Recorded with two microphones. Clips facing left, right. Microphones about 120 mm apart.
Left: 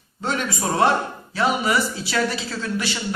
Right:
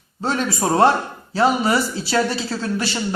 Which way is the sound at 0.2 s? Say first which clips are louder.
Right 3 dB; 35° right (ahead or behind).